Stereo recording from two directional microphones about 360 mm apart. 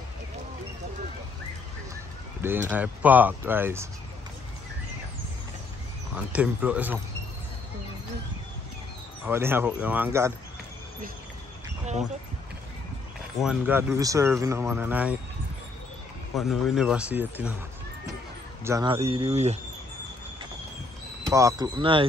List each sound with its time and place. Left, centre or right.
2.4 s speech: centre
6.3 s speech: centre
9.2 s speech: centre
13.4 s speech: centre
16.3 s speech: centre
18.6 s speech: centre
21.3 s speech: centre